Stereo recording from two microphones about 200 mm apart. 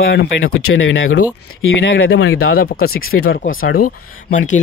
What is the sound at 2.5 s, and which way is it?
Speech, 50° left (ahead or behind).